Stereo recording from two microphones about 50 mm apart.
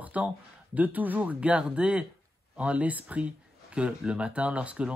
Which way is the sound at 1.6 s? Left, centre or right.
Centre.